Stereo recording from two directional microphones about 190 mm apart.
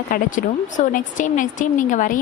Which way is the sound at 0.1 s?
45° left (ahead or behind).